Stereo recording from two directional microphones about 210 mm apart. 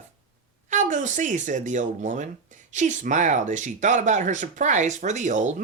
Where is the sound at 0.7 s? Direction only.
35° right (ahead or behind).